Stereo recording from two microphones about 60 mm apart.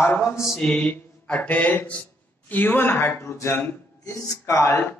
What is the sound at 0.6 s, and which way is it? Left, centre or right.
Mantra, centre.